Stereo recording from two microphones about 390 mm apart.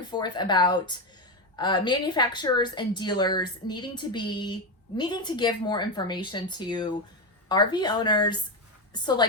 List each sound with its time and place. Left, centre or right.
0.1 s a woman's voice: centre